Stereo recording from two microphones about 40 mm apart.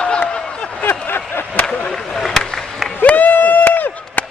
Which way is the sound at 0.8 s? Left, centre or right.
Left.